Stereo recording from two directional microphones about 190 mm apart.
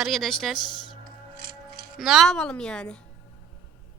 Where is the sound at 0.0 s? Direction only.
Centre (ahead or behind).